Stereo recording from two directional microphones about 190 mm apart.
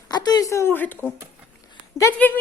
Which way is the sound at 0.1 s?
20° left (ahead or behind).